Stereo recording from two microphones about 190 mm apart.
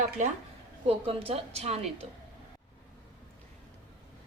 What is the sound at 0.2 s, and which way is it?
Speech, 40° right (ahead or behind).